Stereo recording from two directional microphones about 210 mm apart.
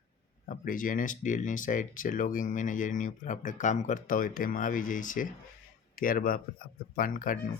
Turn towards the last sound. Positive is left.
turn(degrees=40)  # may be behind; listen again after turning